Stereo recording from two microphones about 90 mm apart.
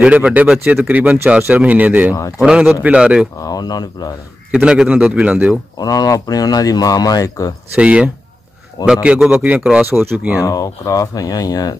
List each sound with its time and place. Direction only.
0.0 s speech: 15° right (ahead or behind)
3.3 s speech: 45° left (ahead or behind)
4.5 s speech: 10° right (ahead or behind)
5.8 s speech: 40° left (ahead or behind)
7.7 s speech: 10° right (ahead or behind)
10.4 s speech: 40° left (ahead or behind)